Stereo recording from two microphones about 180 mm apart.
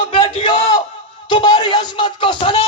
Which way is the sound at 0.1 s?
30° left (ahead or behind).